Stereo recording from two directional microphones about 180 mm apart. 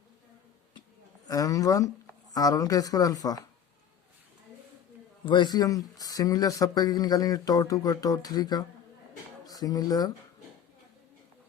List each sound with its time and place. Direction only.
1.3 s a man's voice: 20° left (ahead or behind)
5.2 s a man's voice: 25° left (ahead or behind)